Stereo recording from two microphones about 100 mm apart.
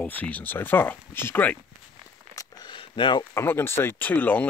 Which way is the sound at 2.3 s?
50° left (ahead or behind).